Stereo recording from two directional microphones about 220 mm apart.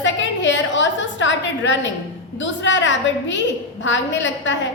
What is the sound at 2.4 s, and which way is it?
A woman's voice, 55° left (ahead or behind).